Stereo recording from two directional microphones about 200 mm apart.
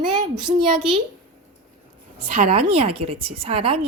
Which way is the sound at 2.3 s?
30° right (ahead or behind).